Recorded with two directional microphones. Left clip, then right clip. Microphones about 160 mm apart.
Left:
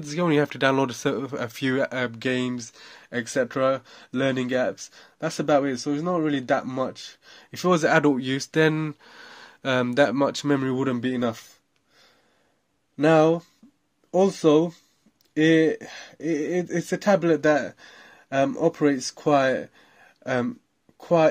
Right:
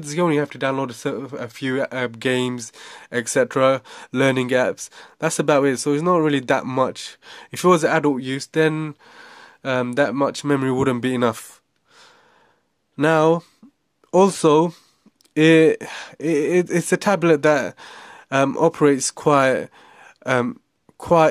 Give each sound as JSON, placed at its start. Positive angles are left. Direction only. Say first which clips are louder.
{"t": 0.0, "sound": "speech", "louder": "right 5 dB", "side_deg": -30}
{"t": 0.3, "sound": "speech", "louder": "even", "side_deg": -5}
{"t": 7.7, "sound": "speech", "louder": "right 1 dB", "side_deg": -20}
{"t": 10.6, "sound": "speech", "louder": "right 5 dB", "side_deg": -30}
{"t": 12.9, "sound": "speech", "louder": "right 2 dB", "side_deg": -45}